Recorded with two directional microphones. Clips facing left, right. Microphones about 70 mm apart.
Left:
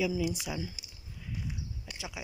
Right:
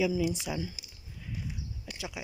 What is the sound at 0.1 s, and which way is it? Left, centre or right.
Speech, centre.